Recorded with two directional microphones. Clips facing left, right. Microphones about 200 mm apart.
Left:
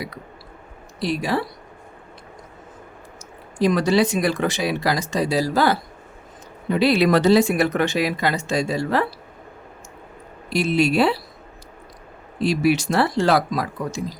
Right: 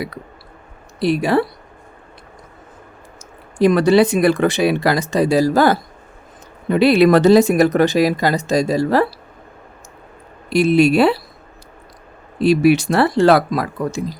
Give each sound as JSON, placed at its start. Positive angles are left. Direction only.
{"t": 0.9, "sound": "speech", "side_deg": -60}
{"t": 3.6, "sound": "speech", "side_deg": -60}
{"t": 6.7, "sound": "speech", "side_deg": -60}
{"t": 10.5, "sound": "speech", "side_deg": -55}
{"t": 12.4, "sound": "speech", "side_deg": -60}